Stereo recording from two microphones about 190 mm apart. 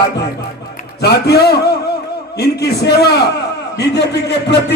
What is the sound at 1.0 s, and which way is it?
A man's voice, 60° left (ahead or behind).